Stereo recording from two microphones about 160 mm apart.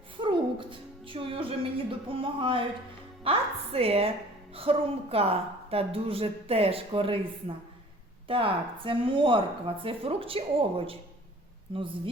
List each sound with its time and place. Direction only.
0.2 s a woman's voice: 30° right (ahead or behind)